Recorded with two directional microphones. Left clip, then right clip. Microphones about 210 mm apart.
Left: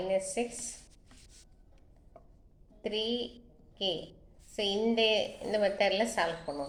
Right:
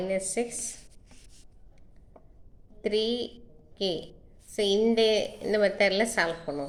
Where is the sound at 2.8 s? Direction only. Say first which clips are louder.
Right 6 dB; 45° right (ahead or behind).